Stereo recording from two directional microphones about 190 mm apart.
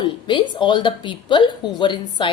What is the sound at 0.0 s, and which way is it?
Speech, 25° left (ahead or behind).